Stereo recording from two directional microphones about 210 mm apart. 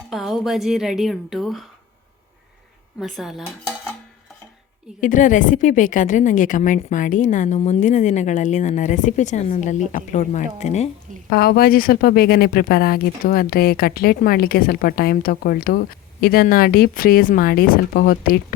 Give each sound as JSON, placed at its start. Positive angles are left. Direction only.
{"t": 0.1, "sound": "a woman's voice", "side_deg": 0}
{"t": 3.0, "sound": "a woman's voice", "side_deg": 0}
{"t": 4.9, "sound": "a woman's voice", "side_deg": 40}
{"t": 11.3, "sound": "speech", "side_deg": 45}